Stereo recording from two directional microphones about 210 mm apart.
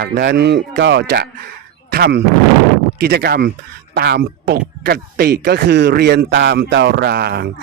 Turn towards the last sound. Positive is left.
turn(degrees=-50)  # may be behind; listen again after turning